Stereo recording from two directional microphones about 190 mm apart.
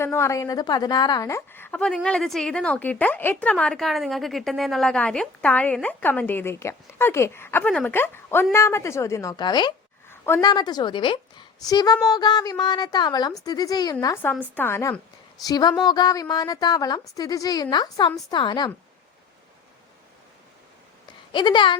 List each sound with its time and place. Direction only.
0.0 s a woman's voice: 15° left (ahead or behind)
10.1 s a woman's voice: 15° left (ahead or behind)
21.3 s a woman's voice: 25° left (ahead or behind)